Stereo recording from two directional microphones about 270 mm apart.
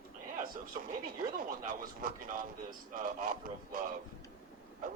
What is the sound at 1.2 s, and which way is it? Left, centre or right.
A man's voice, right.